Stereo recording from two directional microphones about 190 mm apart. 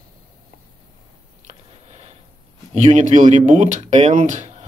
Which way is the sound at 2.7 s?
35° right (ahead or behind).